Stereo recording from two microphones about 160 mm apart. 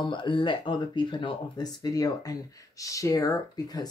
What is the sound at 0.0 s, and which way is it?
Speech, 30° left (ahead or behind).